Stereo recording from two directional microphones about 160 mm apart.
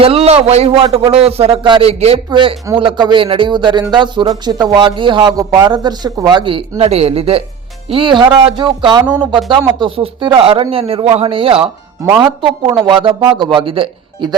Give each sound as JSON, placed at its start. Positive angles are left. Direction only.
{"t": 0.0, "sound": "speech", "side_deg": -40}